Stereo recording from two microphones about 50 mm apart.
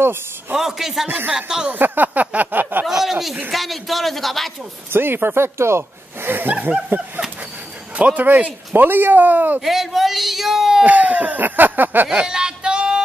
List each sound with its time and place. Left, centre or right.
0.6 s a man's voice: centre
1.0 s speech: right
1.3 s a man's voice: centre
1.7 s a sound: right
2.9 s speech: centre
4.9 s speech: right
6.9 s speech: right
7.9 s speech: right
9.6 s speech: centre
10.8 s speech: right
12.3 s a sound: centre